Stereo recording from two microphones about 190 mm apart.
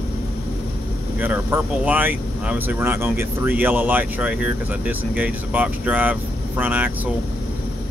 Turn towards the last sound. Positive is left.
turn(degrees=-10)  # may be behind; listen again after turning